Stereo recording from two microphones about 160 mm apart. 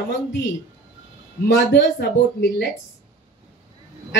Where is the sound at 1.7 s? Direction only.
90° left.